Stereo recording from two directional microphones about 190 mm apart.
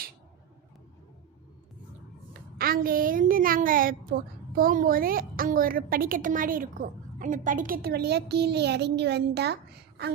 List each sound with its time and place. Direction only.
2.6 s a woman's voice: 50° right (ahead or behind)